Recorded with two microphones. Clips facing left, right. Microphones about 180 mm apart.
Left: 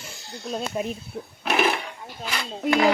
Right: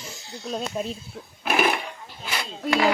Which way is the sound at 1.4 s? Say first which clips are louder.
Even; 5° right (ahead or behind).